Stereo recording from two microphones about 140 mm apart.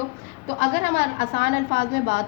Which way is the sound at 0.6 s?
90° left.